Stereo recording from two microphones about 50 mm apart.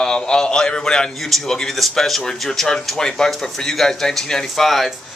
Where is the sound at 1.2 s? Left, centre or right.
Centre.